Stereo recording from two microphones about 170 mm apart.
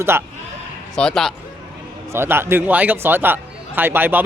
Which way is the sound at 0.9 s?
5° left (ahead or behind).